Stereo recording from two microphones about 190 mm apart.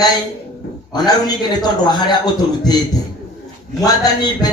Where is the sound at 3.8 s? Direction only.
20° left (ahead or behind).